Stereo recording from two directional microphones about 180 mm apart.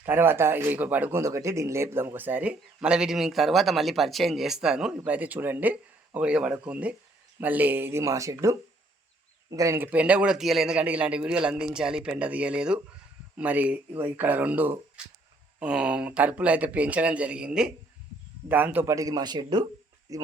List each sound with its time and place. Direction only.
0.0 s a man's voice: 10° right (ahead or behind)